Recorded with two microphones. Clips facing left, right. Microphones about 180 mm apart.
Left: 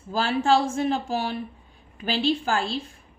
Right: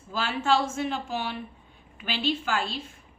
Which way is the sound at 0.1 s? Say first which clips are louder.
Left 4 dB; 40° left (ahead or behind).